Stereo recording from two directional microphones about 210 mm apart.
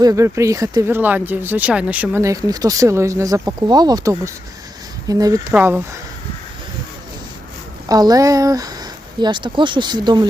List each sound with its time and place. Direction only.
0.0 s speech: 15° right (ahead or behind)
7.9 s speech: 15° right (ahead or behind)